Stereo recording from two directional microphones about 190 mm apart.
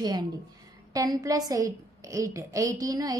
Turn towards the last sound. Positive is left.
turn(degrees=-20)  # may be behind; listen again after turning